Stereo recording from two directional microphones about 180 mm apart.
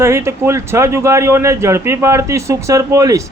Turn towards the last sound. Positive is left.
turn(degrees=-20)  # may be behind; listen again after turning